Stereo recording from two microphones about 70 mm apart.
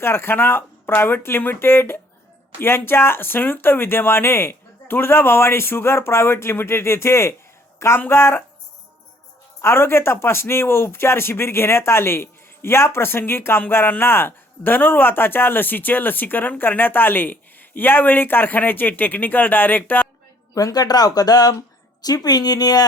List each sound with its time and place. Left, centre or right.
0.0 s a man's voice: left
9.6 s a man's voice: left
20.6 s speech: left